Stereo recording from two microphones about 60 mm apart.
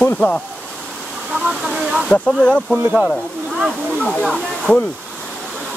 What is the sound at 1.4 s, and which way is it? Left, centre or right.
Speech, centre.